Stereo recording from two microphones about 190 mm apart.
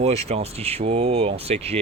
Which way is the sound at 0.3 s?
30° right (ahead or behind).